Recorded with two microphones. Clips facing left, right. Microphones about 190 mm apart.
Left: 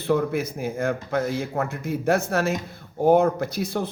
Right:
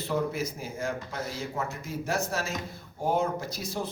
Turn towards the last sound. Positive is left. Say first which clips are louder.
# left 8 dB
turn(degrees=60)  # may be behind; listen again after turning